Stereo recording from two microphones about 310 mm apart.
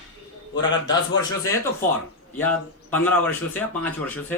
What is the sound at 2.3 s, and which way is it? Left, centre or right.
A man's voice, centre.